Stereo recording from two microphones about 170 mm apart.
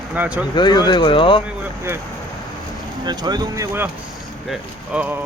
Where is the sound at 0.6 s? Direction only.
25° left (ahead or behind).